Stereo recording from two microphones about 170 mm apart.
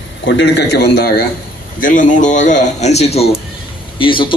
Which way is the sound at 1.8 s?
50° left (ahead or behind).